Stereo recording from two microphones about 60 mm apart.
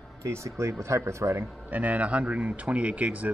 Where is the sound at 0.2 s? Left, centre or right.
Right.